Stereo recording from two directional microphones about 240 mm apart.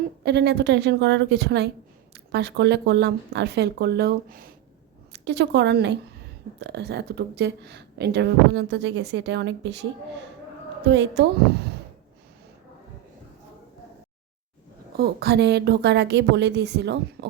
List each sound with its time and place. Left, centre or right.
0.3 s a woman's voice: right
10.8 s a woman's voice: right
14.9 s a woman's voice: right